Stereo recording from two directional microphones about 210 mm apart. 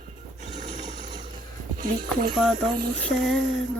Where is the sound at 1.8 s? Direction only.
40° right (ahead or behind).